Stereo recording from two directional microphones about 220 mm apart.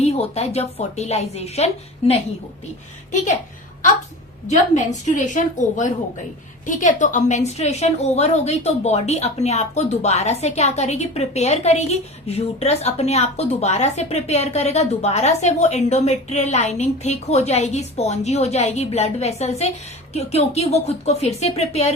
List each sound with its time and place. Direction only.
0.0 s a woman's voice: 30° left (ahead or behind)
4.4 s a woman's voice: 35° left (ahead or behind)